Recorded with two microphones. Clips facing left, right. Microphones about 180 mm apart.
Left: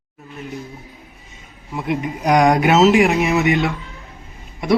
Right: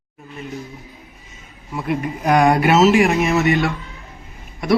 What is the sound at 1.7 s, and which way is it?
A man's voice, 15° left (ahead or behind).